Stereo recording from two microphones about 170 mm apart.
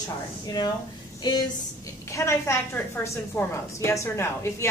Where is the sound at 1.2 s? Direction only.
25° left (ahead or behind).